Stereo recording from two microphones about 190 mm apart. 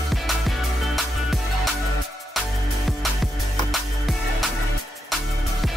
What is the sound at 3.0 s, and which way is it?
Music, centre (ahead or behind).